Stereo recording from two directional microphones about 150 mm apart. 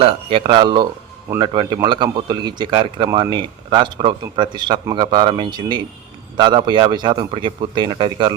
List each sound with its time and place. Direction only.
0.0 s speech: 40° right (ahead or behind)